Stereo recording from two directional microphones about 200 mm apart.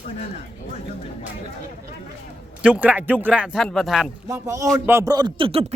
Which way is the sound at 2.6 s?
5° right (ahead or behind).